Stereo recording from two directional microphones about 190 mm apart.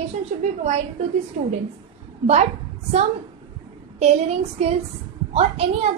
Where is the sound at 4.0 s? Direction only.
35° right (ahead or behind).